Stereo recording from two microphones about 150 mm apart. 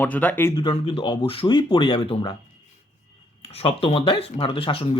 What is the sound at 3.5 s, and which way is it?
Speech, 40° left (ahead or behind).